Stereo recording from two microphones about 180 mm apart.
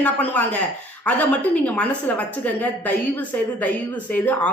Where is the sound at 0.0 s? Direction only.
10° left (ahead or behind).